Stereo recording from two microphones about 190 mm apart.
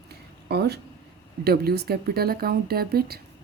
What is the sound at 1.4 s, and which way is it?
A woman's voice, 55° right (ahead or behind).